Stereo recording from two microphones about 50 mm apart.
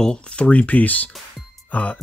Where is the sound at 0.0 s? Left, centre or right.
Centre.